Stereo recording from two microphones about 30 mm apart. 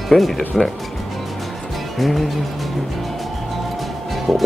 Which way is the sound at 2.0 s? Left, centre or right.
Centre.